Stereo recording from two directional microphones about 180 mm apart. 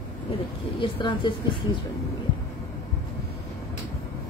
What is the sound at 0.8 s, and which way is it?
Speech, 25° left (ahead or behind).